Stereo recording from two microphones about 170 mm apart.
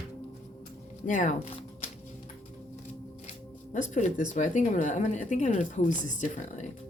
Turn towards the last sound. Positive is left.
turn(degrees=45)  # may be behind; listen again after turning